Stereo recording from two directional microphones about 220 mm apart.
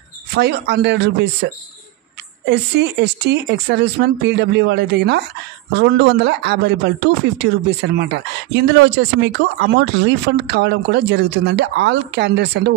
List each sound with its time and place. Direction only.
0.3 s speech: 50° right (ahead or behind)